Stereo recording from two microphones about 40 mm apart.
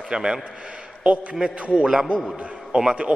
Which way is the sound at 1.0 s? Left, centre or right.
Right.